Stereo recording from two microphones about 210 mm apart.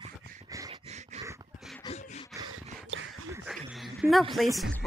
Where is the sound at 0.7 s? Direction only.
30° right (ahead or behind).